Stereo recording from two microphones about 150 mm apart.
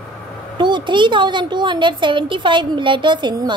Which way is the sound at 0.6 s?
30° right (ahead or behind).